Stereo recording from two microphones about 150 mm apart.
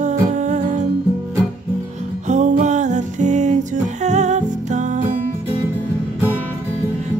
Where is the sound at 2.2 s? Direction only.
55° right (ahead or behind).